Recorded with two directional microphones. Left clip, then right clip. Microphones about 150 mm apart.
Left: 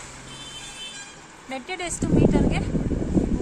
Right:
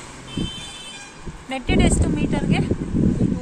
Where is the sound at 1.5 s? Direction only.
Centre (ahead or behind).